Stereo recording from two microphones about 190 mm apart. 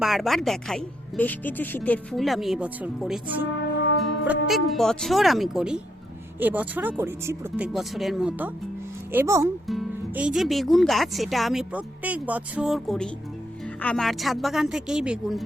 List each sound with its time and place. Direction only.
0.0 s speech: centre (ahead or behind)
9.1 s speech: 15° right (ahead or behind)
9.6 s speech: 5° right (ahead or behind)